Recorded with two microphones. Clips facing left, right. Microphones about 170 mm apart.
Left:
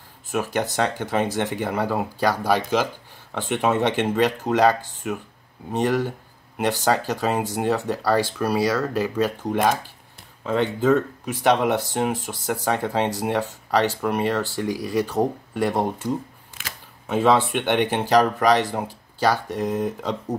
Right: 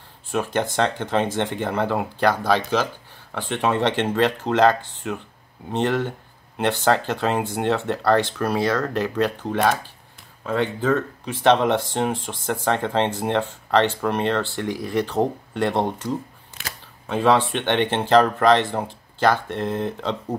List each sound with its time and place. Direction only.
0.3 s speech: 10° left (ahead or behind)